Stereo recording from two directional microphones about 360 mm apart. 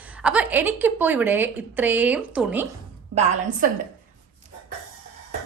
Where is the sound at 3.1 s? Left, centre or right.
Centre.